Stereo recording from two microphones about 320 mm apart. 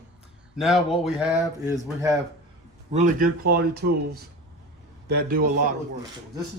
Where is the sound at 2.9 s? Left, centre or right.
Right.